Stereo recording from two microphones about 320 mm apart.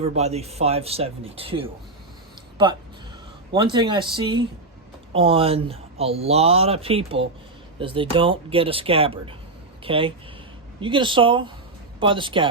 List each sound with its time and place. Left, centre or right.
0.2 s speech: centre
3.5 s speech: centre